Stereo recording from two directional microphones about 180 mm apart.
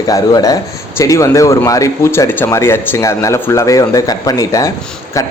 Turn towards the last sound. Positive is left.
turn(degrees=20)  # may be behind; listen again after turning